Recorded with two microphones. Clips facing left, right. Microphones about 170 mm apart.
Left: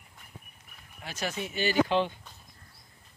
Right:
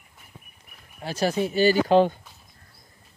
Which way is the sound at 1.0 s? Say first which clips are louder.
Right 10 dB; 35° right (ahead or behind).